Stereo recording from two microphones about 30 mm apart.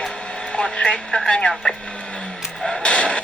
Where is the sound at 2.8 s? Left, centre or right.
Left.